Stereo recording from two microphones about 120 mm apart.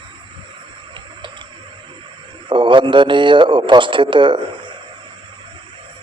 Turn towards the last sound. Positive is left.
turn(degrees=-40)  # may be behind; listen again after turning